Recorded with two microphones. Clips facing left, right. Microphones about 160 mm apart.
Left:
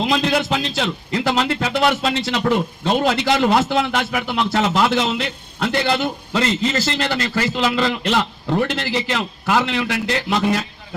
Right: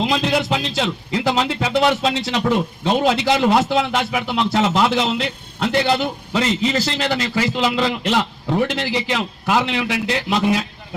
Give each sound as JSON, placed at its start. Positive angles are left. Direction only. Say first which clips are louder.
{"t": 0.1, "sound": "a man's voice", "louder": "even", "side_deg": -15}